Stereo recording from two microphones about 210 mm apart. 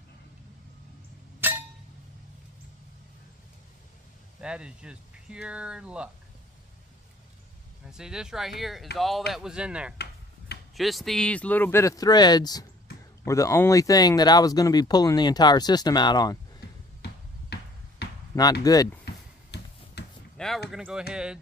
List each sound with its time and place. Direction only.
1.4 s chink: 10° right (ahead or behind)
4.4 s speech: 5° right (ahead or behind)
7.8 s speech: 5° right (ahead or behind); by 16.3 s 20° left (ahead or behind)
17.0 s basketball bounce: 55° left (ahead or behind)
18.3 s speech: 15° left (ahead or behind)
19.0 s a sound: 50° left (ahead or behind)
20.3 s a sound: centre (ahead or behind)
20.7 s speech: 5° right (ahead or behind)